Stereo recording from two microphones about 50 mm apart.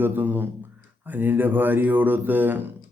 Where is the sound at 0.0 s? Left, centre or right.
Right.